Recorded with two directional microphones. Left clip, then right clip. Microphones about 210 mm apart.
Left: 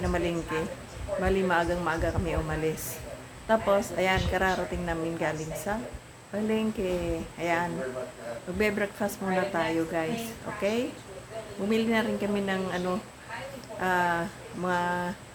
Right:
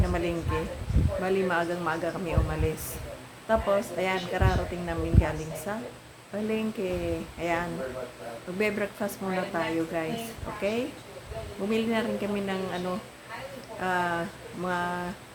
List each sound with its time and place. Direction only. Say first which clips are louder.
0.1 s speech: even; centre (ahead or behind)